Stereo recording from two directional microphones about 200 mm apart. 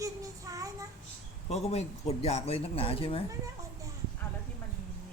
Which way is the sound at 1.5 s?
30° left (ahead or behind).